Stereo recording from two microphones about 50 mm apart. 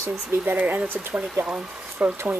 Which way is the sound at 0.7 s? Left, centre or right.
Right.